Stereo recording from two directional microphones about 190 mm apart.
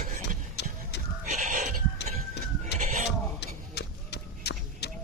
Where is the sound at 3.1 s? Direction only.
60° left (ahead or behind).